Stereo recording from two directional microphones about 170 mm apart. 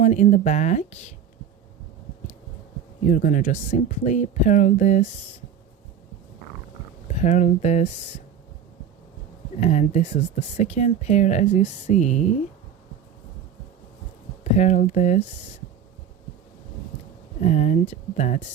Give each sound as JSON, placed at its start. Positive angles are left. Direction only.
{"t": 0.0, "sound": "speech", "side_deg": 45}
{"t": 3.0, "sound": "speech", "side_deg": 50}
{"t": 7.1, "sound": "speech", "side_deg": 45}
{"t": 9.6, "sound": "speech", "side_deg": 40}
{"t": 14.4, "sound": "speech", "side_deg": 40}
{"t": 17.4, "sound": "speech", "side_deg": 45}